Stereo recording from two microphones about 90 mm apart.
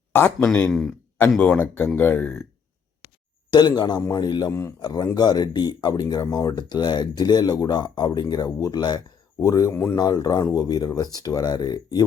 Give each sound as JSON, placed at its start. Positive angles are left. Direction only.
{"t": 0.1, "sound": "speech", "side_deg": 25}
{"t": 0.7, "sound": "speech", "side_deg": 5}
{"t": 1.4, "sound": "speech", "side_deg": 15}
{"t": 3.5, "sound": "speech", "side_deg": 50}
{"t": 10.0, "sound": "speech", "side_deg": 45}